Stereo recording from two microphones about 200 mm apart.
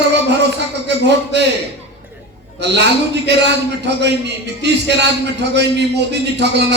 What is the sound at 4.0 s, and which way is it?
A man's voice, 60° right (ahead or behind).